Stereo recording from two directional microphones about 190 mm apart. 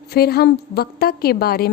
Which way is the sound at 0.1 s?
55° left (ahead or behind).